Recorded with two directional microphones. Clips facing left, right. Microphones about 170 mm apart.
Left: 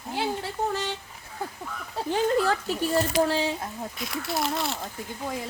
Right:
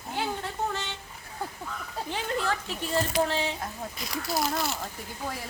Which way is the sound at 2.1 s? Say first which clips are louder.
Left 7 dB; 40° left (ahead or behind).